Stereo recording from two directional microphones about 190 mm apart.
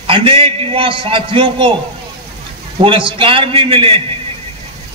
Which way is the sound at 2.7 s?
25° right (ahead or behind).